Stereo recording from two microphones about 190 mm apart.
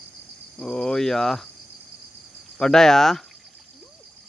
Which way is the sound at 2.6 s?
5° left (ahead or behind).